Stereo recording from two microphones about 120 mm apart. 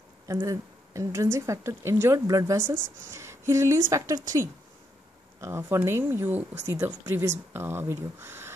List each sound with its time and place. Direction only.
0.3 s a woman's voice: 25° right (ahead or behind)